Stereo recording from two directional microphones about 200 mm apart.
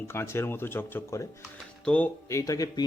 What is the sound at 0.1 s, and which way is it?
Speech, 10° left (ahead or behind).